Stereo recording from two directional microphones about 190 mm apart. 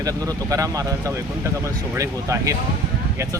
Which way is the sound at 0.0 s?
20° right (ahead or behind).